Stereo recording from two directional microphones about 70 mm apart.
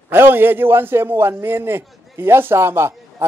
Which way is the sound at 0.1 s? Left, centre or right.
Right.